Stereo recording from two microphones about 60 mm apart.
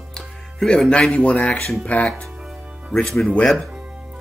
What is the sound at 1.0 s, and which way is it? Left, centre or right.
Speech, centre.